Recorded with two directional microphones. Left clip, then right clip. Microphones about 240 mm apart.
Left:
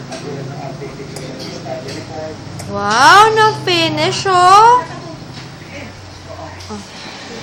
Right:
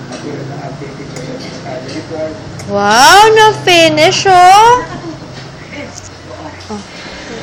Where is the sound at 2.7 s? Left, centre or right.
Centre.